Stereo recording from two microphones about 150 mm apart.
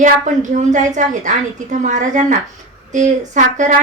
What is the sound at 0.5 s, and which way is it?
A woman's voice, 55° right (ahead or behind).